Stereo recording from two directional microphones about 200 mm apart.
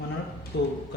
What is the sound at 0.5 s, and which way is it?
Speech, 55° left (ahead or behind).